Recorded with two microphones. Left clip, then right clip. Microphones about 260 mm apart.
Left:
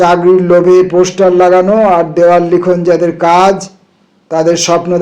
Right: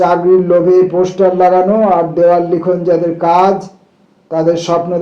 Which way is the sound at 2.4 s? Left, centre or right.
Left.